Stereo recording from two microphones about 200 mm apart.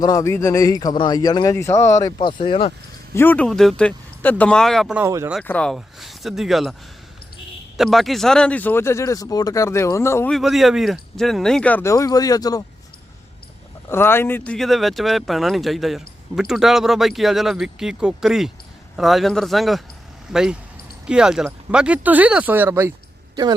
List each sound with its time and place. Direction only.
0.0 s a man's voice: 15° left (ahead or behind)
3.2 s speech: 10° left (ahead or behind)
5.0 s speech: 15° right (ahead or behind)
5.3 s speech: 5° left (ahead or behind)
7.8 s a man's voice: centre (ahead or behind)
10.3 s speech: centre (ahead or behind); by 12.6 s 20° left (ahead or behind)
13.9 s speech: 10° left (ahead or behind); by 22.9 s 10° right (ahead or behind)
23.3 s speech: 20° right (ahead or behind)